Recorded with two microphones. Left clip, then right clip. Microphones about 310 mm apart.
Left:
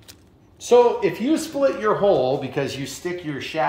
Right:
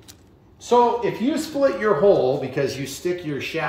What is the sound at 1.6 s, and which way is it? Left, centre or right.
A man's voice, left.